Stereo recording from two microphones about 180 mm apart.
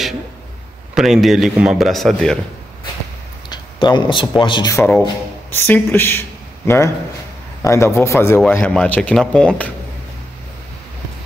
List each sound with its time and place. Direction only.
0.9 s a man's voice: centre (ahead or behind)
3.4 s speech: 25° left (ahead or behind)
5.5 s speech: 10° left (ahead or behind)